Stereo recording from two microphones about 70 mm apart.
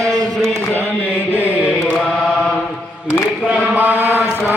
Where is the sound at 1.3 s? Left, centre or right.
Right.